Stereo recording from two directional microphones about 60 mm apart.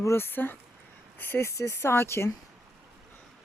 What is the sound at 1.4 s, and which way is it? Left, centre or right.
Speech, left.